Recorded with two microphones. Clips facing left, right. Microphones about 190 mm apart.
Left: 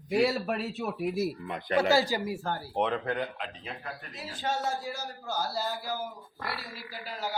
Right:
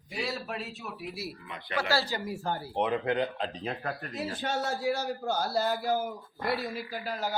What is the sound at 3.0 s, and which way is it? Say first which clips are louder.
Speech: right 4 dB; 25° right (ahead or behind).